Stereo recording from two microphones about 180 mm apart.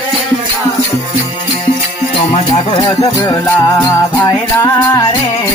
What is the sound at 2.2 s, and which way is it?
Music, 30° left (ahead or behind).